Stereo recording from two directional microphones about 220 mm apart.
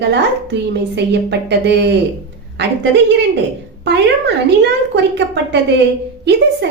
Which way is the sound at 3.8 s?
50° right (ahead or behind).